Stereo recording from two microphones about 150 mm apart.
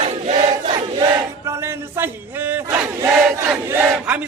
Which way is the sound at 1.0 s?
25° right (ahead or behind).